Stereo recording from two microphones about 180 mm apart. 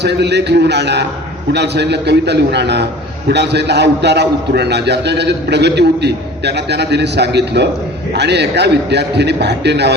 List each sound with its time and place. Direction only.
0.0 s a man's voice: 70° right (ahead or behind)